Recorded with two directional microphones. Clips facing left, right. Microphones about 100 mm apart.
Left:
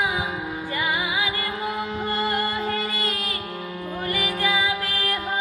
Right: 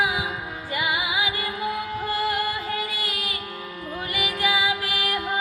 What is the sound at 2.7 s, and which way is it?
Music, 15° right (ahead or behind).